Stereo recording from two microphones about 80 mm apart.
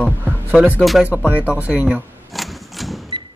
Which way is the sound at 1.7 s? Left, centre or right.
Centre.